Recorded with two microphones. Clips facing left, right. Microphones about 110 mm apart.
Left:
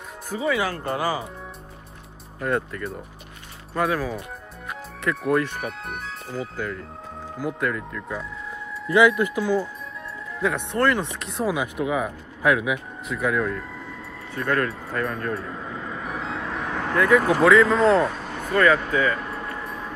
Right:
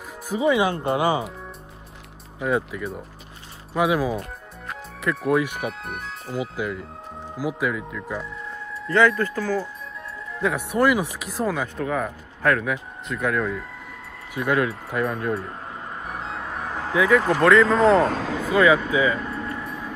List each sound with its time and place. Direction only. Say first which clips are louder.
0.3 s speech: right 4 dB; 20° right (ahead or behind)
2.4 s speech: right 1 dB; 5° right (ahead or behind)
5.0 s speech: right 1 dB; centre (ahead or behind)
8.8 s speech: left 1 dB; 10° left (ahead or behind)
10.4 s speech: right 1 dB; 5° right (ahead or behind)
11.5 s speech: left 1 dB; 10° left (ahead or behind)
14.3 s speech: right 2 dB; 10° right (ahead or behind)
16.0 s music: left 1 dB; 90° left
16.9 s speech: even; 5° right (ahead or behind)
18.0 s speech: right 4 dB; 90° right
18.5 s speech: right 1 dB; 10° right (ahead or behind)